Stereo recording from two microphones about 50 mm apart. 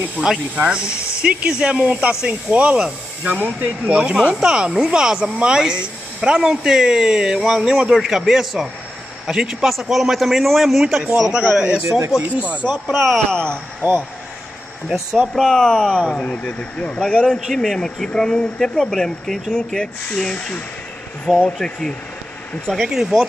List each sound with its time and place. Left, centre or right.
0.2 s speech: left
0.6 s speech: centre
4.4 s a man's voice: centre
11.3 s speech: centre
12.8 s a man's voice: centre
13.3 s speech: centre
13.8 s speech: right
15.1 s a man's voice: centre
15.5 s speech: centre
17.6 s speech: centre
21.4 s speech: centre
22.8 s speech: centre